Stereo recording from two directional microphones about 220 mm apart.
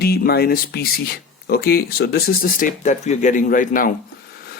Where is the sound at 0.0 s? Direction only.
45° left (ahead or behind).